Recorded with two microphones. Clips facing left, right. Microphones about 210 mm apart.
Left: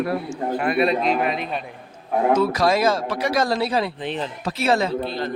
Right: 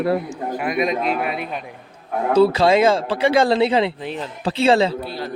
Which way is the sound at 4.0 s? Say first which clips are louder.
Left 1 dB; centre (ahead or behind).